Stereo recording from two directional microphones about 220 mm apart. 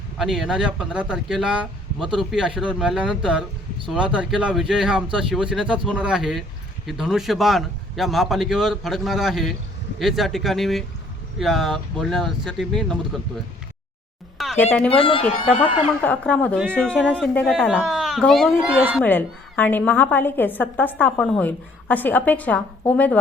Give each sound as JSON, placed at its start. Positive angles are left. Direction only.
{"t": 0.2, "sound": "speech", "side_deg": 0}
{"t": 14.4, "sound": "a sound", "side_deg": 0}
{"t": 14.8, "sound": "speech", "side_deg": 25}
{"t": 16.0, "sound": "speech", "side_deg": 5}
{"t": 19.0, "sound": "a woman's voice", "side_deg": 10}